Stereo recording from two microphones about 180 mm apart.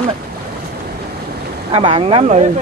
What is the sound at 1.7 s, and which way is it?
Speech, 30° right (ahead or behind).